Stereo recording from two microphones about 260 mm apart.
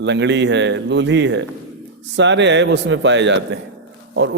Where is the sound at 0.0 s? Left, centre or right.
Right.